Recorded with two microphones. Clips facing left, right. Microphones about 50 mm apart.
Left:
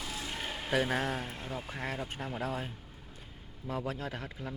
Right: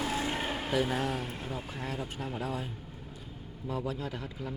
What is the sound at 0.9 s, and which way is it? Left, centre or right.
Speech, left.